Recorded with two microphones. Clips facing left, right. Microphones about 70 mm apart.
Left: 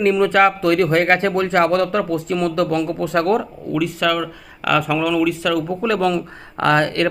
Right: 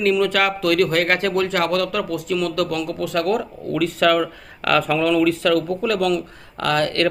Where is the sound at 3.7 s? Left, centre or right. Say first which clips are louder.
Right 2 dB; centre.